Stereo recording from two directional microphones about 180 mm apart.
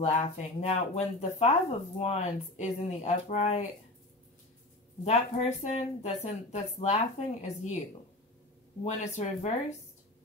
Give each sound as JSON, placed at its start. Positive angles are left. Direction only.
{"t": 0.0, "sound": "speech", "side_deg": 35}
{"t": 5.0, "sound": "speech", "side_deg": 35}
{"t": 8.8, "sound": "speech", "side_deg": 40}